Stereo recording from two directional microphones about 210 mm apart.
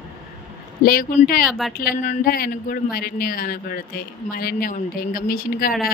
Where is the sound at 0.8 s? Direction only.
45° left (ahead or behind).